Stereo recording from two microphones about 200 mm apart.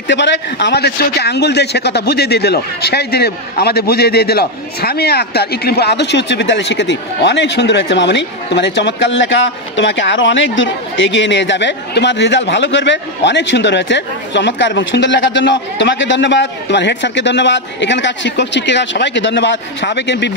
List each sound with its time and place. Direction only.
0.1 s a man's voice: 60° left (ahead or behind)